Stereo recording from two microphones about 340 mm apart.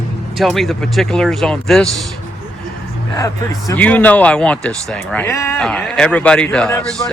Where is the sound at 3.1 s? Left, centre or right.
Centre.